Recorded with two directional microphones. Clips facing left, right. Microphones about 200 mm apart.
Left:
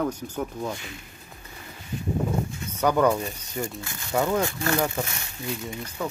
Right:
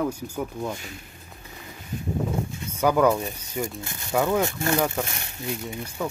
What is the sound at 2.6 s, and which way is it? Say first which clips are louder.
Speech: right 1 dB; 5° right (ahead or behind).